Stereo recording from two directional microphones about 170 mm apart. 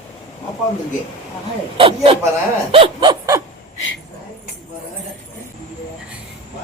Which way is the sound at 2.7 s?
30° right (ahead or behind).